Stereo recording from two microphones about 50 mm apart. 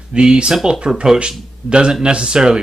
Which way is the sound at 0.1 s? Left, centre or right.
Centre.